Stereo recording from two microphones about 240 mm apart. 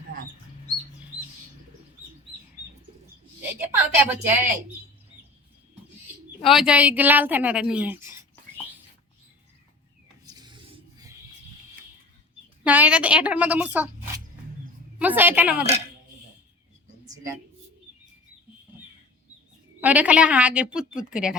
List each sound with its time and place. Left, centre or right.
3.5 s a woman's voice: centre
6.4 s a woman's voice: centre
10.2 s rub: centre
12.6 s a woman's voice: centre
14.9 s a woman's voice: centre
19.8 s a woman's voice: centre